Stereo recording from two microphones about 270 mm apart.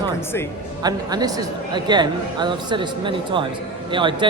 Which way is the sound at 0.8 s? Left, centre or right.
Centre.